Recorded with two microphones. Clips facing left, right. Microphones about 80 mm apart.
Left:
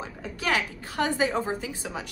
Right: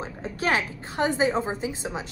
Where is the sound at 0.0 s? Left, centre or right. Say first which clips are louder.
Right 3 dB; right.